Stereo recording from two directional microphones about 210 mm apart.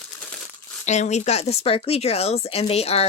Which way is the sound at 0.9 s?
35° left (ahead or behind).